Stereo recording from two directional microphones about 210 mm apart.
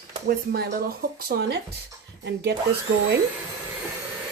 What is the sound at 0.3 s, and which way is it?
Speech, 45° right (ahead or behind).